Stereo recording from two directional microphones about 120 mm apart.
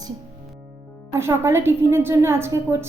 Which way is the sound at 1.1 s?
20° right (ahead or behind).